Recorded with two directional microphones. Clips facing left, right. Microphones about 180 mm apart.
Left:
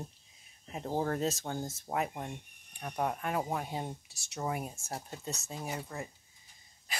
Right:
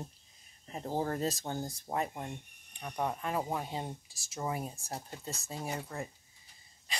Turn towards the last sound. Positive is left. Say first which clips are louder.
# even
turn(degrees=5)  # may be behind; listen again after turning